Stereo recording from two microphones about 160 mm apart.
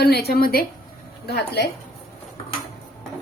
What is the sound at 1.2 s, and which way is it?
Speech, 90° left.